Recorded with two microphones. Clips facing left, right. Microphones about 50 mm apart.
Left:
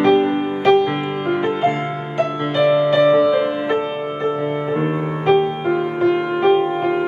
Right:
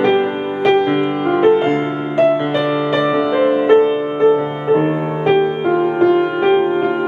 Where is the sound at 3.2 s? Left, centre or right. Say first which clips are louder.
Right 3 dB; right.